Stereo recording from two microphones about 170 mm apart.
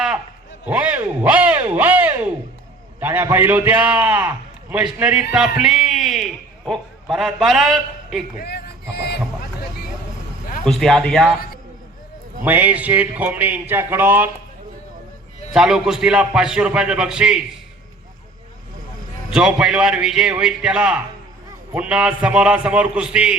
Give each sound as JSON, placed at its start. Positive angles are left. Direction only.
{"t": 0.7, "sound": "a man's voice", "side_deg": -10}
{"t": 5.3, "sound": "a sound", "side_deg": -5}
{"t": 6.7, "sound": "a man's voice", "side_deg": 0}
{"t": 8.4, "sound": "boat", "side_deg": 65}
{"t": 10.7, "sound": "a man's voice", "side_deg": 0}
{"t": 12.5, "sound": "a man's voice", "side_deg": -10}
{"t": 15.5, "sound": "a man's voice", "side_deg": -5}
{"t": 19.3, "sound": "a man's voice", "side_deg": -5}